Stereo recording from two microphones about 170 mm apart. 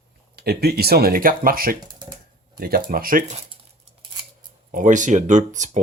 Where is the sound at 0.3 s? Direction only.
65° right (ahead or behind); by 3.4 s 45° right (ahead or behind).